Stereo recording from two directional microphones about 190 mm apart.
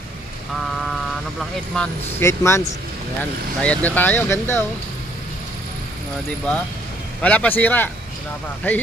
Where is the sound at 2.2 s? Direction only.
15° left (ahead or behind).